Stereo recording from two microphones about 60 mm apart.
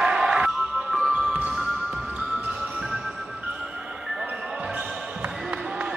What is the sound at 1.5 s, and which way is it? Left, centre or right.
Music, centre.